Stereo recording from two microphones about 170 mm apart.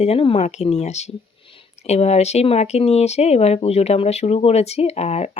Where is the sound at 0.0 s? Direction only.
35° left (ahead or behind).